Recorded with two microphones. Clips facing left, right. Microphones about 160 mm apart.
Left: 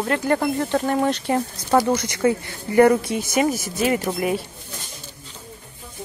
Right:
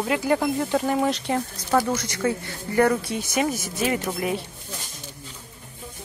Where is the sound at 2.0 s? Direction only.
15° left (ahead or behind).